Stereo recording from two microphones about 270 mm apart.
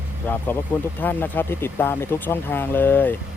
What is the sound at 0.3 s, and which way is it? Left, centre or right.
Speech, centre.